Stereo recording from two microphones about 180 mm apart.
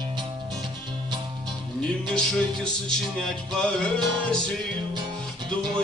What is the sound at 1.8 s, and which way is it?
Music, 5° left (ahead or behind).